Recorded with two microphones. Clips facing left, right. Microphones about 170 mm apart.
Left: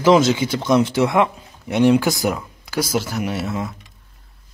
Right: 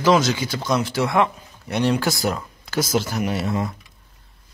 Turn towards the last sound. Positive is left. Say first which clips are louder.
# right 1 dB
turn(degrees=0)  # may be behind; listen again after turning